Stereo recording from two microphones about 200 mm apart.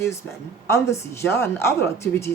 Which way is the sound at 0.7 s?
15° left (ahead or behind).